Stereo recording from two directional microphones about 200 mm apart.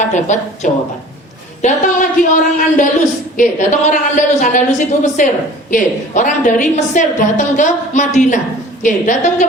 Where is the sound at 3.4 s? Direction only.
40° left (ahead or behind).